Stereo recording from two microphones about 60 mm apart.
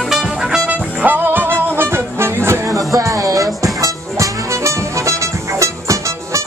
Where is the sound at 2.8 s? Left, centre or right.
Right.